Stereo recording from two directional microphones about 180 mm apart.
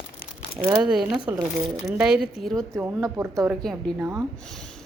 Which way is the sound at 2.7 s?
15° right (ahead or behind).